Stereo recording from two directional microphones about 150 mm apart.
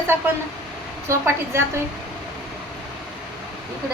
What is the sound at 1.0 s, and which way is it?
Speech, 15° right (ahead or behind).